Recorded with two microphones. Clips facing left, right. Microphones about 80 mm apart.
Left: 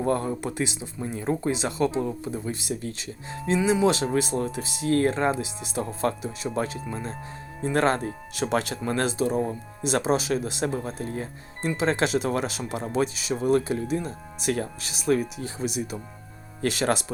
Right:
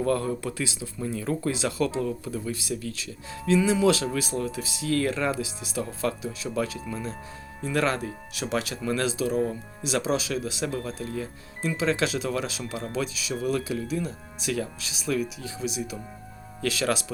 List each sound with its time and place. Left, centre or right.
0.0 s speech: left